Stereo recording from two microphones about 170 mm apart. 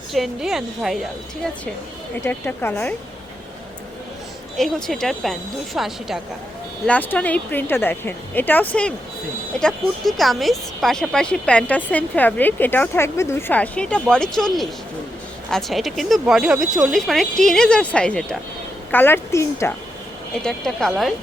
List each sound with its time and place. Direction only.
0.1 s speech: centre (ahead or behind)
2.2 s speech: 15° left (ahead or behind)
4.5 s speech: centre (ahead or behind)
6.8 s speech: 10° left (ahead or behind)
20.3 s speech: 5° left (ahead or behind)